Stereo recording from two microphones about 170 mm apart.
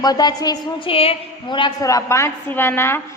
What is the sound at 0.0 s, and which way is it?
A woman's voice, 25° left (ahead or behind).